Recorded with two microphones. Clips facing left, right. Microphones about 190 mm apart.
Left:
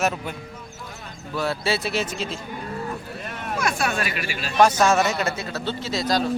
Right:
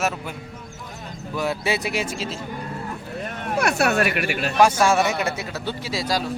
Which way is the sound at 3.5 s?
65° right (ahead or behind).